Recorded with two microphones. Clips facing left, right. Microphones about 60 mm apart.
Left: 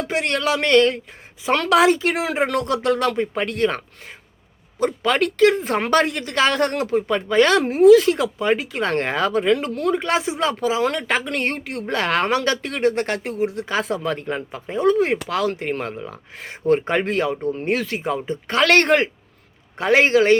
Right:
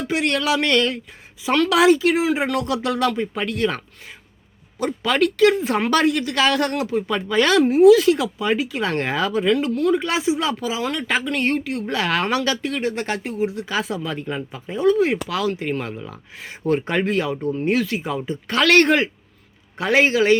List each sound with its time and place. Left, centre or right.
0.1 s a woman's voice: left